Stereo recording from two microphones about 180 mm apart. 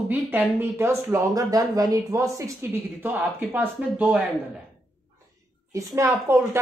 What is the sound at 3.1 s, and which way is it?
Speech, centre (ahead or behind).